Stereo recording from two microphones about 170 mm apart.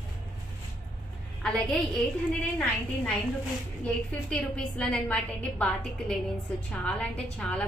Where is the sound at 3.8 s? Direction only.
5° left (ahead or behind).